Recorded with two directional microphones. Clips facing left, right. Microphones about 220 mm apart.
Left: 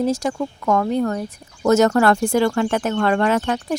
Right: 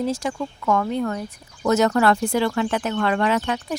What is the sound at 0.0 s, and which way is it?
A woman's voice, 45° left (ahead or behind).